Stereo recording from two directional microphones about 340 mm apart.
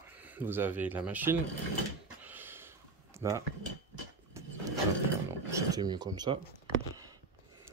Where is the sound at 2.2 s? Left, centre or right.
Centre.